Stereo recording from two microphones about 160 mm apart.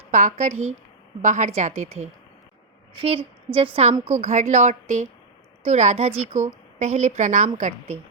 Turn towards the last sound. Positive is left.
turn(degrees=-50)  # may be behind; listen again after turning